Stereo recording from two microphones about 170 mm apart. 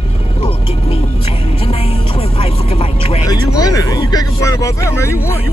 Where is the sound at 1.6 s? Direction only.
35° left (ahead or behind).